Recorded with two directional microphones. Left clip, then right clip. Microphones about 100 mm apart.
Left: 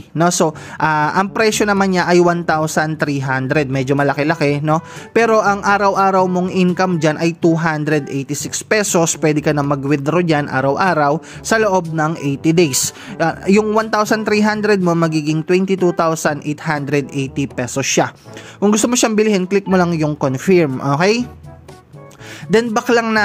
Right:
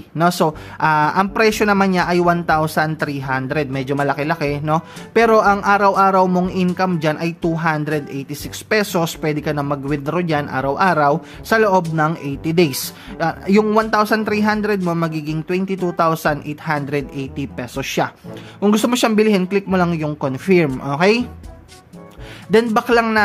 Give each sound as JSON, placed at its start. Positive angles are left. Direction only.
{"t": 0.2, "sound": "speech", "side_deg": 40}
{"t": 22.8, "sound": "speech", "side_deg": 45}